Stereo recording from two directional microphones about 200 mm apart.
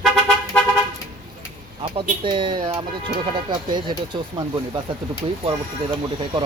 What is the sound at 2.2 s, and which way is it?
Speech, 25° right (ahead or behind).